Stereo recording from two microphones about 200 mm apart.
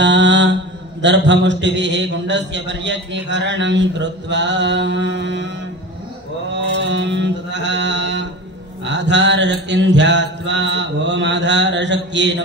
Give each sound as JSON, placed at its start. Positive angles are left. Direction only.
{"t": 0.0, "sound": "mantra", "side_deg": -65}
{"t": 1.0, "sound": "a man's voice", "side_deg": -65}
{"t": 6.5, "sound": "music", "side_deg": -65}
{"t": 8.8, "sound": "a man's voice", "side_deg": -65}